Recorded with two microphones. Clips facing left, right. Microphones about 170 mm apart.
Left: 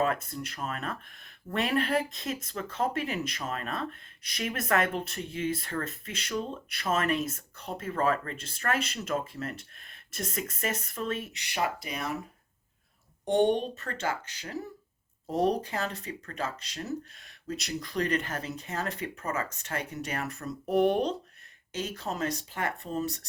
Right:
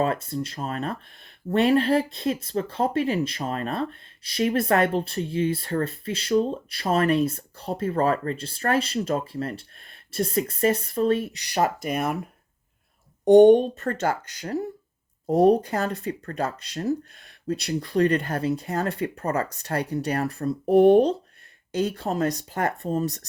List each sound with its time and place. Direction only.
0.0 s speech: 30° right (ahead or behind); by 12.2 s 55° right (ahead or behind)
13.2 s speech: 45° right (ahead or behind)
15.9 s speech: 35° right (ahead or behind)